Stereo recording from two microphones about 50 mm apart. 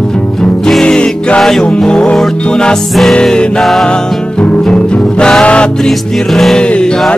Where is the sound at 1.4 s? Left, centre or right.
Centre.